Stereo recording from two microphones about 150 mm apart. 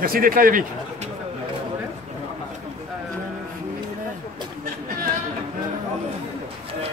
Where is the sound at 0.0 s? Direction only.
75° right (ahead or behind).